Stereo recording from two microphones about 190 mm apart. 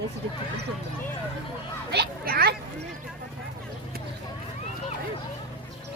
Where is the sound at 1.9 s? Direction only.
55° right (ahead or behind).